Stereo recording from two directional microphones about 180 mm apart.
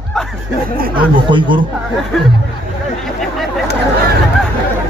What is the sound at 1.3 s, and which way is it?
Speech, 25° right (ahead or behind).